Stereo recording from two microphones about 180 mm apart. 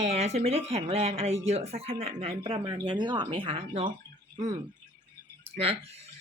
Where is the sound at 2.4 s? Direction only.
25° right (ahead or behind).